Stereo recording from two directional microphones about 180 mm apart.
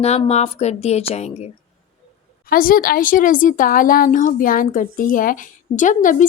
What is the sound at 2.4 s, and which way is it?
A woman's voice, 55° left (ahead or behind).